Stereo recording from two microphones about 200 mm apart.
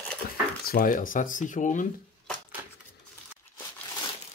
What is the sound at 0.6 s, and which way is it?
Speech, 45° left (ahead or behind).